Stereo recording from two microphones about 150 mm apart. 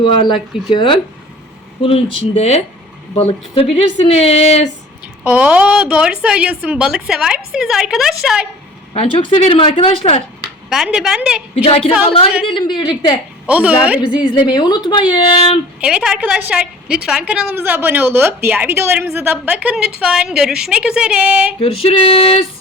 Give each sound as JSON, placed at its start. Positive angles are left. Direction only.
{"t": 0.0, "sound": "speech", "side_deg": 30}
{"t": 5.2, "sound": "a woman's voice", "side_deg": -10}
{"t": 8.9, "sound": "speech", "side_deg": 40}
{"t": 10.7, "sound": "a woman's voice", "side_deg": -5}
{"t": 11.5, "sound": "speech", "side_deg": 40}
{"t": 13.5, "sound": "a woman's voice", "side_deg": -10}
{"t": 14.2, "sound": "speech", "side_deg": 30}
{"t": 15.8, "sound": "a woman's voice", "side_deg": -5}
{"t": 21.6, "sound": "speech", "side_deg": 40}